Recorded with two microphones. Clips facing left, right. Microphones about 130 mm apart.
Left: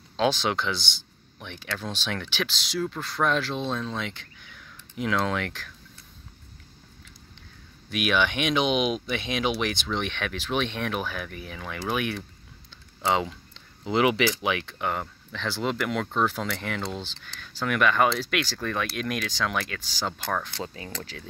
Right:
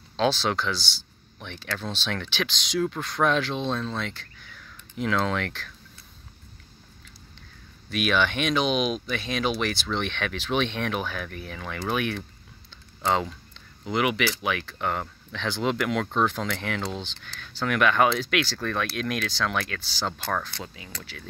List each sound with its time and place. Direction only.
0.2 s speech: 15° left (ahead or behind)
1.4 s speech: 10° left (ahead or behind)
7.9 s speech: 10° left (ahead or behind)
13.8 s speech: 30° left (ahead or behind)
14.8 s speech: 5° left (ahead or behind); by 20.7 s 20° left (ahead or behind)